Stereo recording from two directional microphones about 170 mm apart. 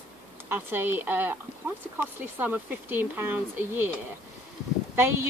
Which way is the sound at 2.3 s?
10° right (ahead or behind).